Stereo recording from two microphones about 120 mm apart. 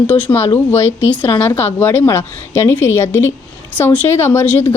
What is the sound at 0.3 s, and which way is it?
Speech, 30° left (ahead or behind).